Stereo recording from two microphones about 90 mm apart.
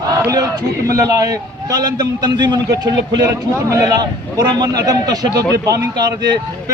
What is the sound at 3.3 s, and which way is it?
A man's voice, 35° right (ahead or behind).